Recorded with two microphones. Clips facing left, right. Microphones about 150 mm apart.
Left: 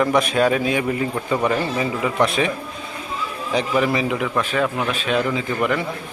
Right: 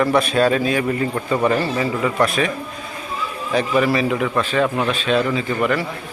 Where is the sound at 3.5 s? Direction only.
15° left (ahead or behind).